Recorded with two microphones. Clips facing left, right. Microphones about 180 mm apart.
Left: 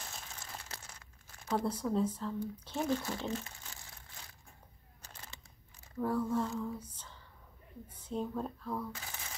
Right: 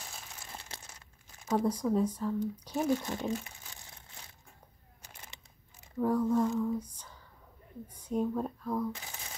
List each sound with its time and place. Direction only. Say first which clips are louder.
0.0 s crumpling: even; 10° right (ahead or behind)
0.6 s crumpling: right 1 dB; 25° right (ahead or behind)
1.6 s speech: right 4 dB; 10° right (ahead or behind)
5.0 s a sound: even; 15° right (ahead or behind)
5.9 s speech: right 5 dB; 15° right (ahead or behind)
7.9 s speech: right 6 dB; 10° right (ahead or behind)